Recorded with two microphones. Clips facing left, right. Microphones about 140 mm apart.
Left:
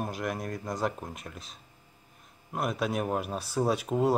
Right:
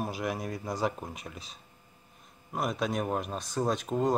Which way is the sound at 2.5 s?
Centre (ahead or behind).